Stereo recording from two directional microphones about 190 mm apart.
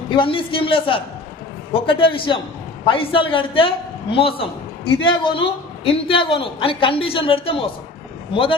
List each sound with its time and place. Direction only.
0.1 s a man's voice: 25° left (ahead or behind)